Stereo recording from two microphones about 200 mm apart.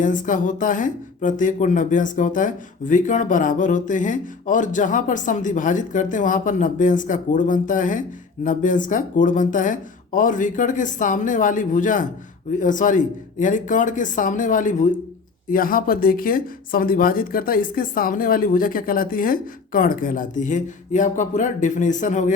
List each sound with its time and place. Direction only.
0.0 s speech: 40° left (ahead or behind)